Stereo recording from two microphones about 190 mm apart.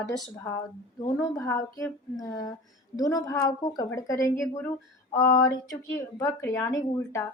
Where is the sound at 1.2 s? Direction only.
15° left (ahead or behind).